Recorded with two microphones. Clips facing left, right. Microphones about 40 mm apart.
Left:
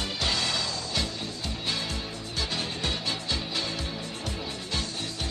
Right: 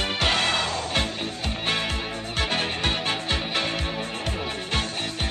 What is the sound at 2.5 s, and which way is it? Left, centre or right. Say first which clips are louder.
Music: right 6 dB; right.